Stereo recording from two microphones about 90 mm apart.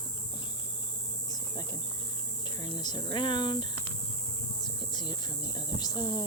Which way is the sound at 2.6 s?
50° left (ahead or behind).